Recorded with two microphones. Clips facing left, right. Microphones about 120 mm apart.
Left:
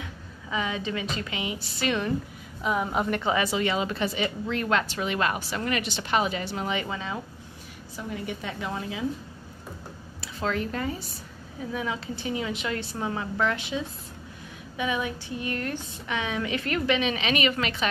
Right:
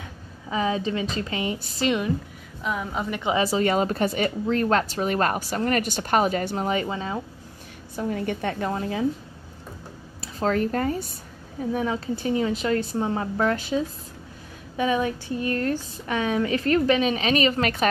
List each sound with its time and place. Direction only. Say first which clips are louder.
0.5 s a woman's voice: right 5 dB; 35° right (ahead or behind)
1.9 s a woman's voice: right 3 dB; 15° right (ahead or behind)
2.6 s a woman's voice: left 2 dB; 5° left (ahead or behind)
3.3 s speech: right 4 dB; 35° right (ahead or behind)
7.9 s a woman's voice: right 7 dB; 55° right (ahead or behind)
8.6 s speech: right 4 dB; 45° right (ahead or behind)
10.2 s a woman's voice: right 5 dB; 40° right (ahead or behind)